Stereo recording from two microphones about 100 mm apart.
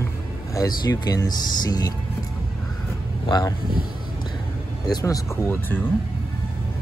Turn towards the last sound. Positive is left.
turn(degrees=20)  # may be behind; listen again after turning